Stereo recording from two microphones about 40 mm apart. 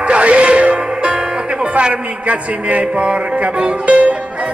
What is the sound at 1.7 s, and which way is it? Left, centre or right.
A man's voice, right.